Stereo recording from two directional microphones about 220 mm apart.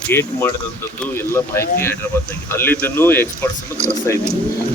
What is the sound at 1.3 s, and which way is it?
Speech, 10° left (ahead or behind).